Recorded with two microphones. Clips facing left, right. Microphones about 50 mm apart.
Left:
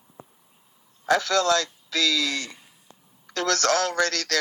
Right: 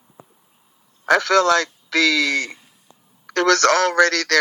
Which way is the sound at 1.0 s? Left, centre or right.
Right.